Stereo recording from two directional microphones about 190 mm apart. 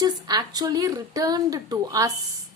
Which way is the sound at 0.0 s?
20° right (ahead or behind).